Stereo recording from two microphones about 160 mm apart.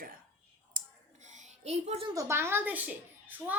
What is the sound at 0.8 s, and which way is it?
Clicking, 55° right (ahead or behind).